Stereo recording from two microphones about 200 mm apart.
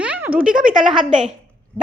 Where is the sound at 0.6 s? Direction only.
40° right (ahead or behind).